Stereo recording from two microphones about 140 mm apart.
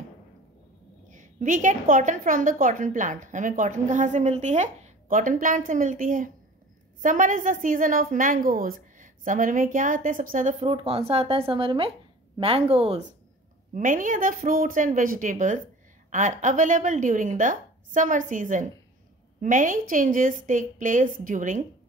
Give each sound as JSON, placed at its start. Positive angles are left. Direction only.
{"t": 1.1, "sound": "a woman's voice", "side_deg": -65}
{"t": 5.0, "sound": "a woman's voice", "side_deg": -75}
{"t": 10.6, "sound": "a woman's voice", "side_deg": -45}
{"t": 13.7, "sound": "a woman's voice", "side_deg": -70}